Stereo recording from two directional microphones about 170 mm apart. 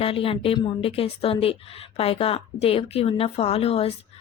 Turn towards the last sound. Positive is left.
turn(degrees=35)  # may be behind; listen again after turning